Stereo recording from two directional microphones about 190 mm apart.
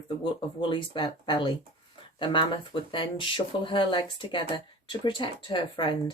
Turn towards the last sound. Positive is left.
turn(degrees=25)  # may be behind; listen again after turning